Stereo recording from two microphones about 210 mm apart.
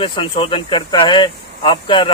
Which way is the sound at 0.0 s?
25° left (ahead or behind).